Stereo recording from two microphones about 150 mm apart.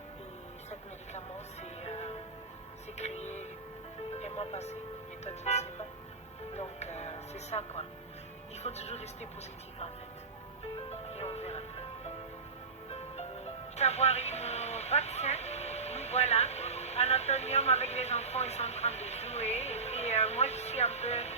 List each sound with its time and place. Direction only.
1.8 s music: 45° left (ahead or behind)
5.2 s speech: 45° left (ahead or behind)
10.8 s speech: 45° left (ahead or behind)